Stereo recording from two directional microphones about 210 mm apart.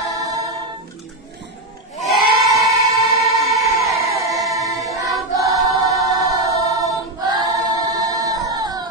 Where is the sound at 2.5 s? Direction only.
15° right (ahead or behind).